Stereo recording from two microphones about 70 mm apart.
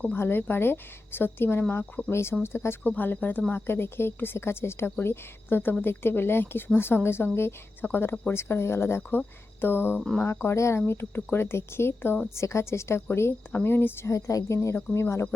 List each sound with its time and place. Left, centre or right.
0.1 s a woman's voice: left
2.8 s a woman's voice: left
14.1 s a woman's voice: left